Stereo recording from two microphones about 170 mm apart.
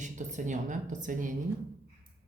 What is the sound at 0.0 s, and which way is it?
A woman's voice, 45° right (ahead or behind).